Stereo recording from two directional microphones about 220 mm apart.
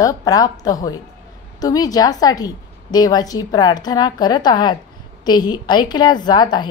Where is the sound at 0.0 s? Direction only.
15° left (ahead or behind).